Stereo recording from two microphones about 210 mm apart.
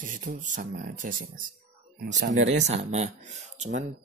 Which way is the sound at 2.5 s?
30° right (ahead or behind).